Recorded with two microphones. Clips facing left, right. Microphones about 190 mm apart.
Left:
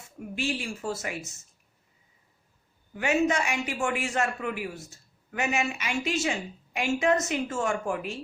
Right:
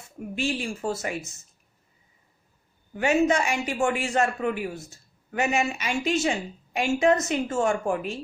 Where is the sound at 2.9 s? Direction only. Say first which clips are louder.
Right 3 dB; 30° right (ahead or behind).